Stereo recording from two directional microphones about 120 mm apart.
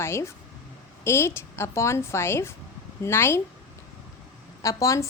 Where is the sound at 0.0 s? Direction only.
20° left (ahead or behind).